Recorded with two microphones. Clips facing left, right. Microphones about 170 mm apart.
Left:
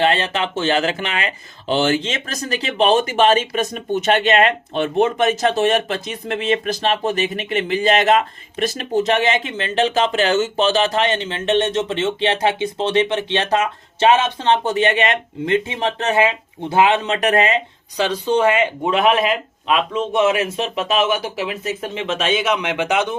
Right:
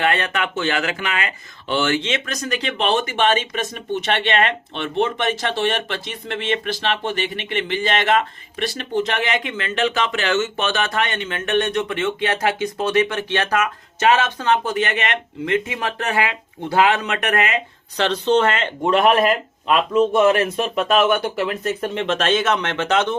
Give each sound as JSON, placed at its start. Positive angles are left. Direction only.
{"t": 0.0, "sound": "speech", "side_deg": 25}
{"t": 17.9, "sound": "speech", "side_deg": 10}